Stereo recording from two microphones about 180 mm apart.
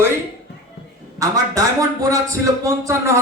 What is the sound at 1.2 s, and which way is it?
Speech, 20° right (ahead or behind).